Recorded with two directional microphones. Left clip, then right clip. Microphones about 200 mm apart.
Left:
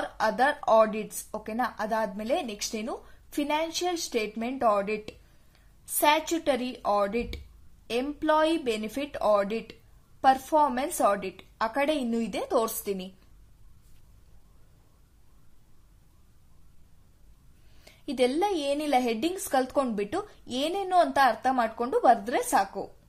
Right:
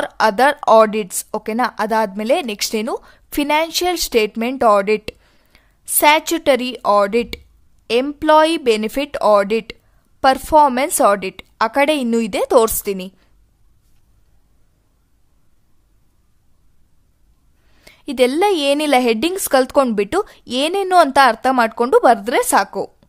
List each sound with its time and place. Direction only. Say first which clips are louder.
0.0 s a woman's voice: right 11 dB; 50° right (ahead or behind)
17.7 s a woman's voice: right 11 dB; 35° right (ahead or behind)